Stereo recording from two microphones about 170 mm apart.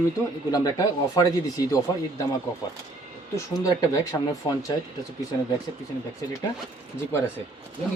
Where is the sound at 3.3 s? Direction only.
20° left (ahead or behind).